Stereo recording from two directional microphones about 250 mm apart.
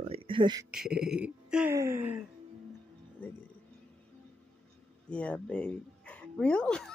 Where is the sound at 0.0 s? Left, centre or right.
Right.